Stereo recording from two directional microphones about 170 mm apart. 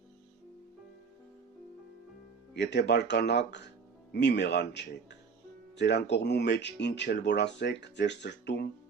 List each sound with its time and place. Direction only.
2.6 s speech: 80° left